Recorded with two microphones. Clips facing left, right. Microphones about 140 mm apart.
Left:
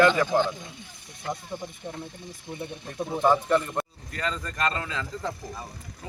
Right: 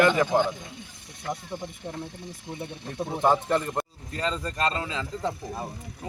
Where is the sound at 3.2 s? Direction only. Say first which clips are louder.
Left 1 dB; 20° right (ahead or behind).